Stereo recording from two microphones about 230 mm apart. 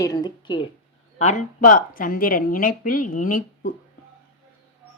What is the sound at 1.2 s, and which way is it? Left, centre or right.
Speech, left.